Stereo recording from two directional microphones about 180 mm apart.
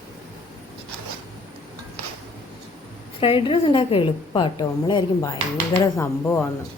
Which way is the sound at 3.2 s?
30° left (ahead or behind).